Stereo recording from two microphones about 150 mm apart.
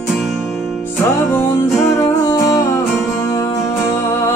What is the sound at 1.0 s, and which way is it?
Music, 15° left (ahead or behind).